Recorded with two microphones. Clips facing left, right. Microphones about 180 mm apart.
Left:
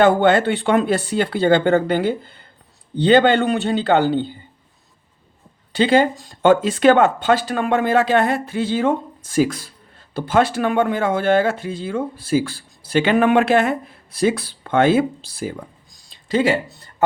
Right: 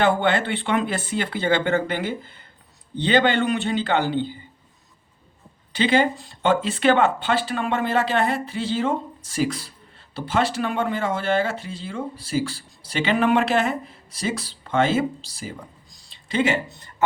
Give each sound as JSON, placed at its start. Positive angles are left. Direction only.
{"t": 0.0, "sound": "speech", "side_deg": 45}
{"t": 5.7, "sound": "speech", "side_deg": 40}
{"t": 16.0, "sound": "speech", "side_deg": 35}